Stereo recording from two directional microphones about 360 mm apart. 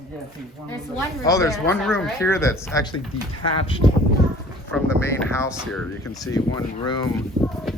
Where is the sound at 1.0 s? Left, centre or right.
Centre.